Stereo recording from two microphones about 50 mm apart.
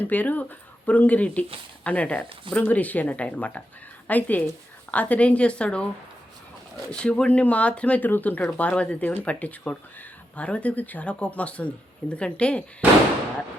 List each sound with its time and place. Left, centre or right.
0.0 s a woman's voice: left
6.9 s speech: centre
7.3 s speech: left
8.0 s speech: left